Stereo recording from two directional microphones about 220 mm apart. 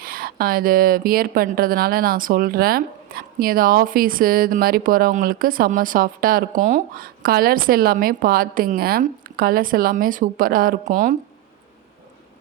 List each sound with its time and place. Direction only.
0.0 s speech: 40° right (ahead or behind)